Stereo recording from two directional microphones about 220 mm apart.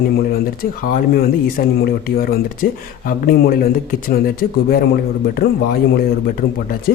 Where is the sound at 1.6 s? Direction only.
45° left (ahead or behind).